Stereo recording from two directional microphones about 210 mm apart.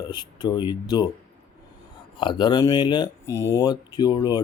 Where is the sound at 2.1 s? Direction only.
20° left (ahead or behind).